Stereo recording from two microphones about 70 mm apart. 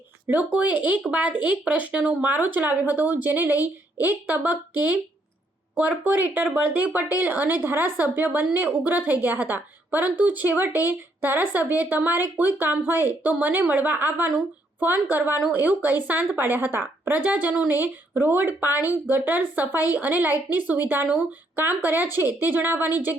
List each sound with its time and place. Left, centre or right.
0.3 s speech: right